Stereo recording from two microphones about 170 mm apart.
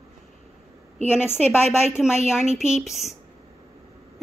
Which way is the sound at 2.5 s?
5° right (ahead or behind).